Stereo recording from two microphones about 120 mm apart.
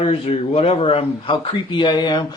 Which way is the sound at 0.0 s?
55° left (ahead or behind).